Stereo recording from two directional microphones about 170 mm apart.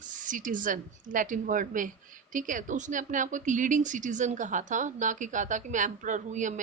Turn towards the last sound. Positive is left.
turn(degrees=-45)  # may be behind; listen again after turning